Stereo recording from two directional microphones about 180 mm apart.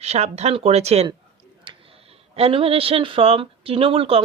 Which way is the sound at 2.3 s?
30° right (ahead or behind).